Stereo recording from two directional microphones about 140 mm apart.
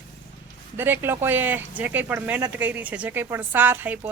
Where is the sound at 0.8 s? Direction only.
15° right (ahead or behind).